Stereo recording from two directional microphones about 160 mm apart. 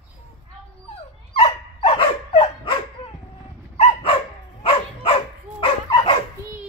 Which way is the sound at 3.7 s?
35° left (ahead or behind).